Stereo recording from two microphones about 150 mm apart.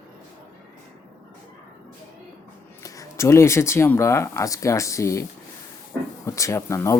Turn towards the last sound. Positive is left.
turn(degrees=20)  # may be behind; listen again after turning